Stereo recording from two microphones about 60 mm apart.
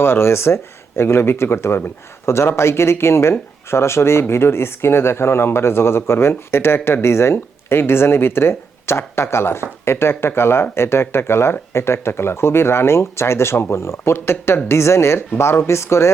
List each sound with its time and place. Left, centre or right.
0.0 s speech: left